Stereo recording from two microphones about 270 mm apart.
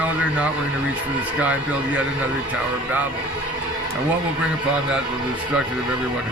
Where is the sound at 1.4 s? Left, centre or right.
Centre.